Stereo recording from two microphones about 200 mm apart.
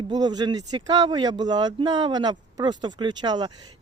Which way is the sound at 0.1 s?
20° right (ahead or behind).